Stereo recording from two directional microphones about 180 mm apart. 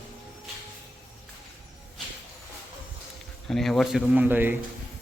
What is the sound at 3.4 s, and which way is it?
A man's voice, centre (ahead or behind).